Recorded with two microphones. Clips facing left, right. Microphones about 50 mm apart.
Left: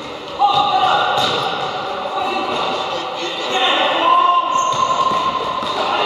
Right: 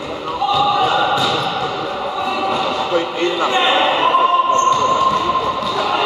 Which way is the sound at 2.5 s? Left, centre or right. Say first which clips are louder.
Right 1 dB; centre.